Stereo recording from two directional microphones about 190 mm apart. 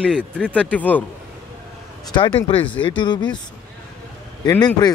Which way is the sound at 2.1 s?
25° left (ahead or behind).